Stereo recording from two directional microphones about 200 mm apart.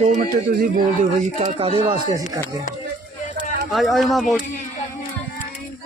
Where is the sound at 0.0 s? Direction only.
40° right (ahead or behind).